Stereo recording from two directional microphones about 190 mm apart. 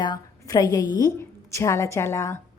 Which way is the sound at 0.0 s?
20° left (ahead or behind).